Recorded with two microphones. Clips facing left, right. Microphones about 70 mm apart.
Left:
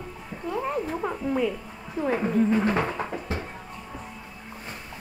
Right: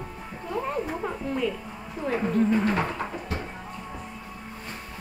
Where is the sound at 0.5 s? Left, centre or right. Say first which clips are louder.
Left 1 dB; centre.